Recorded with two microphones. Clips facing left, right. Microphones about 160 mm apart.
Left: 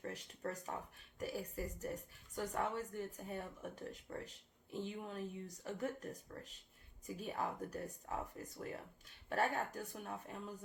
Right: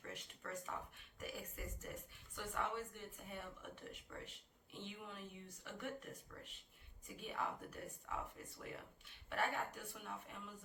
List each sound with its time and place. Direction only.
0.0 s speech: 40° left (ahead or behind)